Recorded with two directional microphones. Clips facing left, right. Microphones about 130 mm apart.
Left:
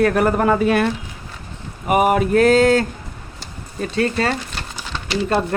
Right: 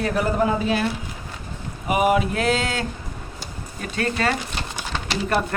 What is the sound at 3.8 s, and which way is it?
Speech, 35° left (ahead or behind).